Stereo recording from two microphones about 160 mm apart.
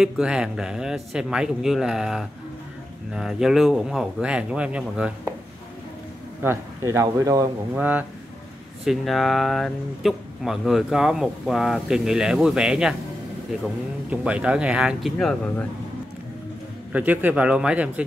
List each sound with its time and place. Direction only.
0.0 s speech: 5° right (ahead or behind)
6.4 s speech: 15° right (ahead or behind)
7.7 s speech: 10° right (ahead or behind)
14.1 s speech: 5° right (ahead or behind); by 15.7 s 10° left (ahead or behind)
16.9 s speech: 10° right (ahead or behind)